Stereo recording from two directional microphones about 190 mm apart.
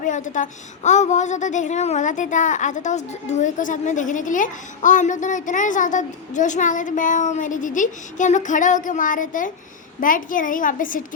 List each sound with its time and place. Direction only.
0.0 s a woman's voice: 40° left (ahead or behind)